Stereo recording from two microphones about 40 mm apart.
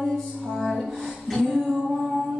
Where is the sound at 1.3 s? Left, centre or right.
Centre.